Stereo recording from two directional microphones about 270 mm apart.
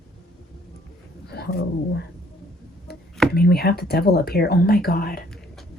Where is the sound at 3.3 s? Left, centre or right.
Left.